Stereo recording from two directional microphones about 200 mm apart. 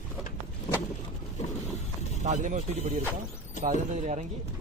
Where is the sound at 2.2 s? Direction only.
35° right (ahead or behind).